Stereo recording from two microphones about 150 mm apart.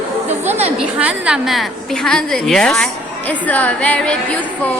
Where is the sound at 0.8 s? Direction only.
10° right (ahead or behind).